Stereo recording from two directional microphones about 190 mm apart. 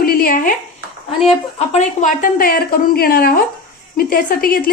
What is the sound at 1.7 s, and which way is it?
A woman's voice, 40° left (ahead or behind).